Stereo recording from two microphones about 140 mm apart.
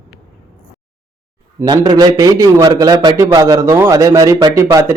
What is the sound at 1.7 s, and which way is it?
A man's voice, 30° right (ahead or behind).